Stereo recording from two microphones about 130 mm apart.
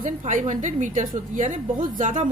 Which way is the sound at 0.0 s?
75° right (ahead or behind).